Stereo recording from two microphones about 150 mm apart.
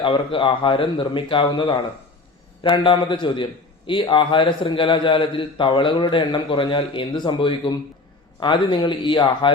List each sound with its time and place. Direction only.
0.0 s a man's voice: 35° left (ahead or behind)